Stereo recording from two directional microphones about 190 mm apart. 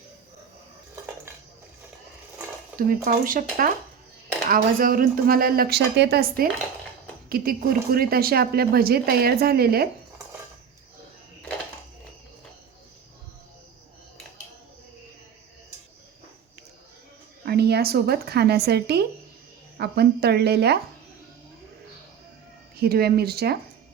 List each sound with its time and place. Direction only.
2.7 s speech: 50° right (ahead or behind)
17.4 s a woman's voice: 55° right (ahead or behind)
22.8 s speech: 55° right (ahead or behind)